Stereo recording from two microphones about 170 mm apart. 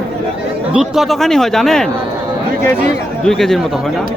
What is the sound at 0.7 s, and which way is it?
A man's voice, 5° right (ahead or behind).